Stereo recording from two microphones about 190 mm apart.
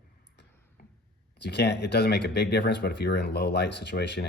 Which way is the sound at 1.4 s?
60° left (ahead or behind).